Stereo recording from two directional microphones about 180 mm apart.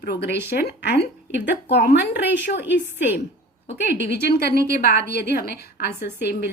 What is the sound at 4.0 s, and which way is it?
A woman's voice, 70° left (ahead or behind).